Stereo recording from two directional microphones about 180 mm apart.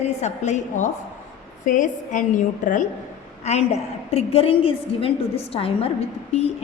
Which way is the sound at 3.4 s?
35° left (ahead or behind).